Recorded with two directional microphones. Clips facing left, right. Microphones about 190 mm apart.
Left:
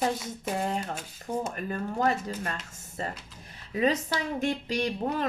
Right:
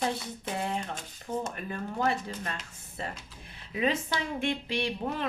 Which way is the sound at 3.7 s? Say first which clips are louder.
Left 3 dB; 40° left (ahead or behind).